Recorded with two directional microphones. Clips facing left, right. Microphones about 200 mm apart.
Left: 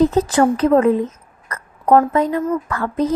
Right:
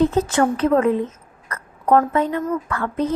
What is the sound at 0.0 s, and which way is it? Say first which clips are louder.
A woman's voice: left 3 dB; 35° left (ahead or behind).